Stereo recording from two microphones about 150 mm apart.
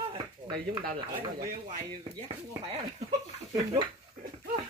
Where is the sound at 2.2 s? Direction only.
40° right (ahead or behind).